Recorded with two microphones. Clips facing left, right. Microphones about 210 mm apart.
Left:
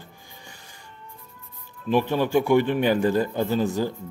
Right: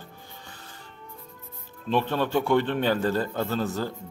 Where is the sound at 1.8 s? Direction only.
10° left (ahead or behind).